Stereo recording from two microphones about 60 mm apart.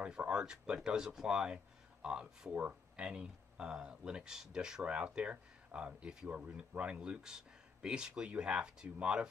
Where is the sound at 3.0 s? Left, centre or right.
Centre.